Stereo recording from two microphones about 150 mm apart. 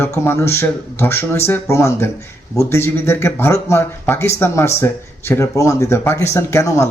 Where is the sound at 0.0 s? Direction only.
15° left (ahead or behind).